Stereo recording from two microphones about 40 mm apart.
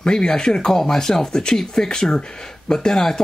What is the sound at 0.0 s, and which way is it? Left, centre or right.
Speech, left.